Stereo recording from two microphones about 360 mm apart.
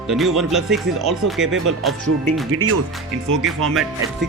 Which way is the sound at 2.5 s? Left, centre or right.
Right.